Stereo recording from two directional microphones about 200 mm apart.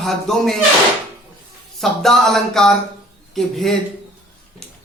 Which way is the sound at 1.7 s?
Centre (ahead or behind).